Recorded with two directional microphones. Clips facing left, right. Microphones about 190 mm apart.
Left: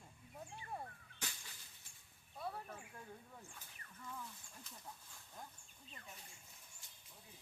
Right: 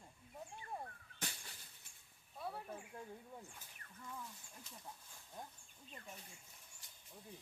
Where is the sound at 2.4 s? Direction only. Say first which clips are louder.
Even; 10° right (ahead or behind).